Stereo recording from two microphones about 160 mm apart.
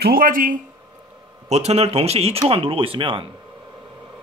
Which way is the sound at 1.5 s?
40° right (ahead or behind).